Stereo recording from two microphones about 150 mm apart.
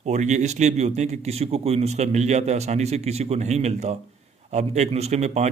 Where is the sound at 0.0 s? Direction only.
50° right (ahead or behind).